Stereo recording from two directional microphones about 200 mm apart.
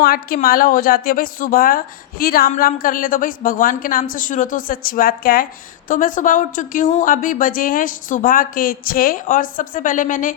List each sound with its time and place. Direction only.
0.0 s a woman's voice: 50° left (ahead or behind)